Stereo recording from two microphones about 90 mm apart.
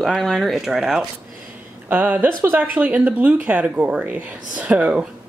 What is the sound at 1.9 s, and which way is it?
Speech, 20° right (ahead or behind).